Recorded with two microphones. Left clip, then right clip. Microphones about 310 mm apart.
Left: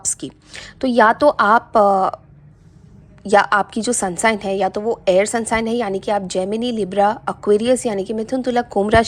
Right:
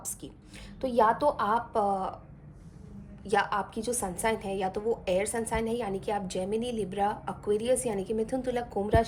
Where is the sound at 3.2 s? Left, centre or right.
Centre.